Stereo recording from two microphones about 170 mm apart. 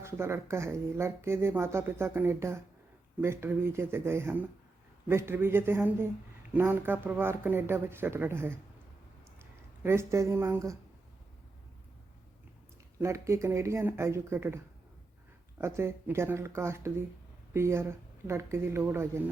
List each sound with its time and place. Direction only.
0.0 s speech: 15° right (ahead or behind)
13.0 s speech: 15° right (ahead or behind)